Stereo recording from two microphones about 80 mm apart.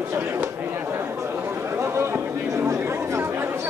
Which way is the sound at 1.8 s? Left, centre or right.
Right.